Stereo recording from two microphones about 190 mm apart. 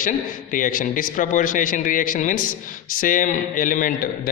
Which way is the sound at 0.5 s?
45° left (ahead or behind).